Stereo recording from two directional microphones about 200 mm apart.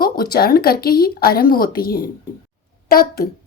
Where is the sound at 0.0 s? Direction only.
50° left (ahead or behind).